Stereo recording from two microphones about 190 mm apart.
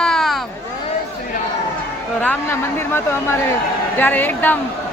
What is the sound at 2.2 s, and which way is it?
Speech, 10° left (ahead or behind).